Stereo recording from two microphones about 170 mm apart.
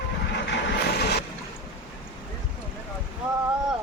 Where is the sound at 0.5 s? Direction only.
75° left (ahead or behind).